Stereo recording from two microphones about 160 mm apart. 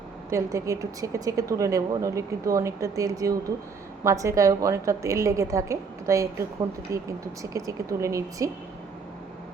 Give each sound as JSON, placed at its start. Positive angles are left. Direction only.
{"t": 0.3, "sound": "speech", "side_deg": -20}